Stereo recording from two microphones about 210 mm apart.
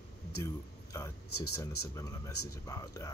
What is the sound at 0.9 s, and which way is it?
Speech, 15° left (ahead or behind).